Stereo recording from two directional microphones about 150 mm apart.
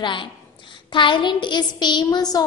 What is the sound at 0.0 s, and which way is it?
A woman's voice, 35° left (ahead or behind).